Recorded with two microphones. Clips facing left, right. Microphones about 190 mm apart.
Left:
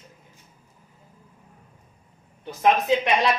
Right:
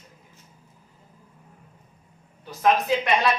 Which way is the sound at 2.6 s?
20° left (ahead or behind).